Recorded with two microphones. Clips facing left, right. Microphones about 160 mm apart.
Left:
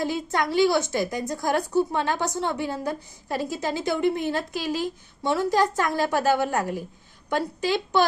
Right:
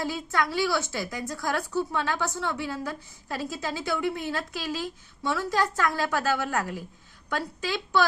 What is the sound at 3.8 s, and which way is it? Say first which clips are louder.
Speech: left 5 dB; 45° left (ahead or behind).